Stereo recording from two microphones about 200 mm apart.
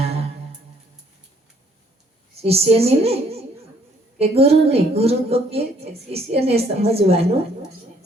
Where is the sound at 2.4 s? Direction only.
30° right (ahead or behind).